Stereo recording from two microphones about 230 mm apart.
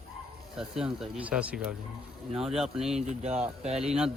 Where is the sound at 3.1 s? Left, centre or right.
Right.